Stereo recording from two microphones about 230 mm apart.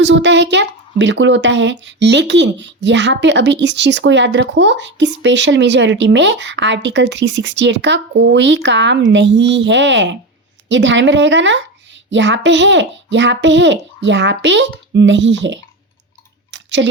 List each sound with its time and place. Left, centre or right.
0.0 s a woman's voice: right
16.5 s clicking: right